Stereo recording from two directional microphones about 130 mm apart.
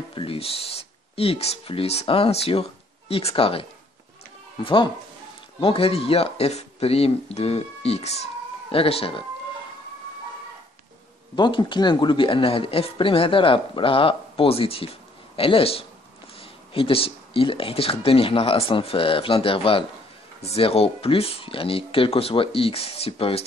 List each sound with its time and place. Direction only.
0.1 s speech: 45° left (ahead or behind)
11.3 s speech: 35° left (ahead or behind)